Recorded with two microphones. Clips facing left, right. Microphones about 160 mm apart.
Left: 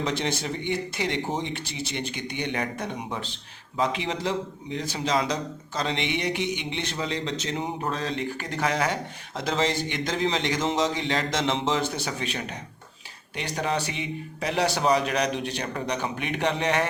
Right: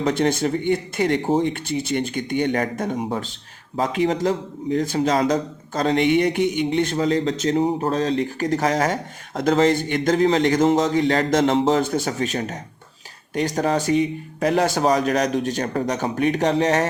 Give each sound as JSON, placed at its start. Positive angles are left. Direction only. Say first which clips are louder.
{"t": 0.0, "sound": "a man's voice", "louder": "right 8 dB", "side_deg": -50}